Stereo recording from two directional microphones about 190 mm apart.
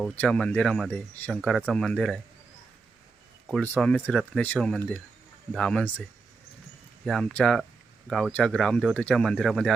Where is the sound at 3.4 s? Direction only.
5° left (ahead or behind).